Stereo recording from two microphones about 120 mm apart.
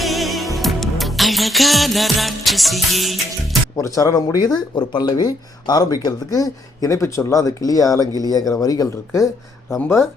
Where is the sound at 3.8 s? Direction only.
25° left (ahead or behind).